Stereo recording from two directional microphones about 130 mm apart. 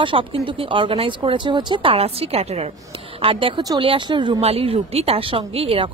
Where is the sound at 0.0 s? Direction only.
40° right (ahead or behind).